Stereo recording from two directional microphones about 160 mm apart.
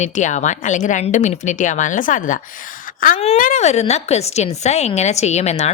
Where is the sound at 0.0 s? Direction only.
50° left (ahead or behind).